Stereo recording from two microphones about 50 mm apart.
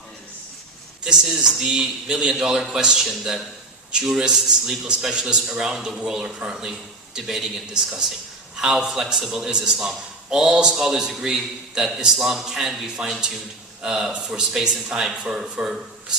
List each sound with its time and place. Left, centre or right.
1.0 s a man's voice: centre